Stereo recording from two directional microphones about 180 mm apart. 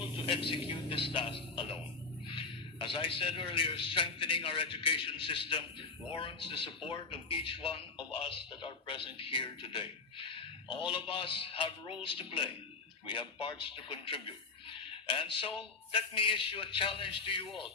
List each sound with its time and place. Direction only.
0.3 s speech: 30° left (ahead or behind)